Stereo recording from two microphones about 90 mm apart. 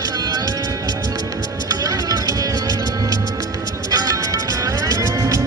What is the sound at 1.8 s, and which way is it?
Music, 40° right (ahead or behind).